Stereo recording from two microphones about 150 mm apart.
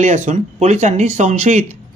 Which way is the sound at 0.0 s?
55° right (ahead or behind).